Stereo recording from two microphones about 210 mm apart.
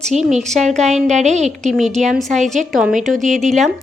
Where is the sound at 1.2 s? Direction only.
35° right (ahead or behind).